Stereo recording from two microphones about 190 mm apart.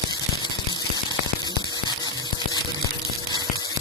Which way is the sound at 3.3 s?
20° left (ahead or behind).